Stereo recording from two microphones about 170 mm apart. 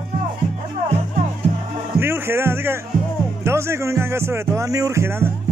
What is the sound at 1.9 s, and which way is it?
Music, 15° right (ahead or behind).